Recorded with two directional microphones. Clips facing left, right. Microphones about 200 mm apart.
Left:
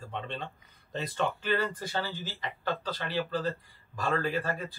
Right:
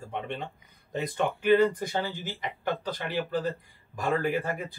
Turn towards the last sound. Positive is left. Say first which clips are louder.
# right 3 dB
turn(degrees=-15)  # may be behind; listen again after turning